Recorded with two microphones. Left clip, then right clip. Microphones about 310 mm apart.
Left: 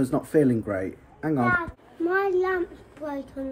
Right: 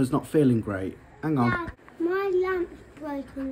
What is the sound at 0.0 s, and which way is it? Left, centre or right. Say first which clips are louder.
A child's voice: left 1 dB; centre.